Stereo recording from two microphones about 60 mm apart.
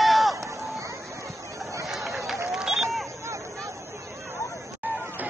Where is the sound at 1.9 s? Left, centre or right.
Centre.